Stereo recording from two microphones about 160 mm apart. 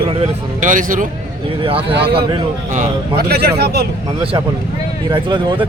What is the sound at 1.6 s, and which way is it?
Speech, 35° right (ahead or behind).